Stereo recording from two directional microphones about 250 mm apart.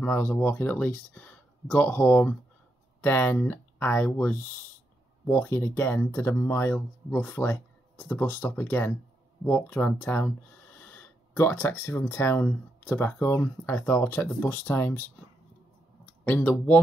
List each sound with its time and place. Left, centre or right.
0.0 s speech: centre
16.3 s speech: centre